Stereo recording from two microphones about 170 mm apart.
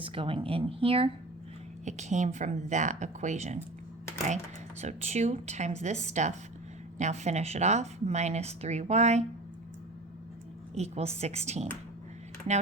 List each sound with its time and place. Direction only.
0.0 s speech: 30° right (ahead or behind)
1.8 s speech: 45° right (ahead or behind)
4.8 s speech: 40° right (ahead or behind)
10.8 s speech: 40° right (ahead or behind)